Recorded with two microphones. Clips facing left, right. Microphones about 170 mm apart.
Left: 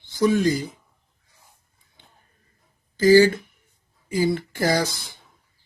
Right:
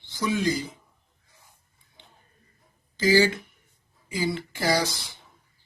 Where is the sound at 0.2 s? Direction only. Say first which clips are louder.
Left 6 dB; 50° left (ahead or behind).